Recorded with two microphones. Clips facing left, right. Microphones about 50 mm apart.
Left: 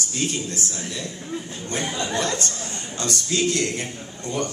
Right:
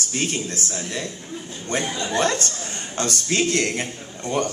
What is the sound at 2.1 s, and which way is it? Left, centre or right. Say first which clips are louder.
A man's voice: right 7 dB; right.